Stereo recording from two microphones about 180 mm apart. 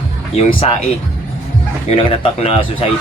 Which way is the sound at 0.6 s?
35° left (ahead or behind).